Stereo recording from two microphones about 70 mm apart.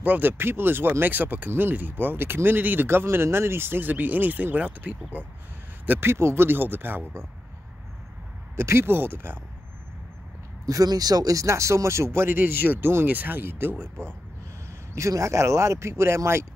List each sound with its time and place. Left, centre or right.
0.0 s speech: right
5.9 s speech: right
8.5 s speech: right
10.7 s speech: right
15.0 s speech: right